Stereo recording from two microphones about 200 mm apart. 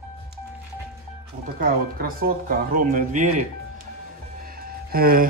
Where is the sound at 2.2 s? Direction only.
45° right (ahead or behind).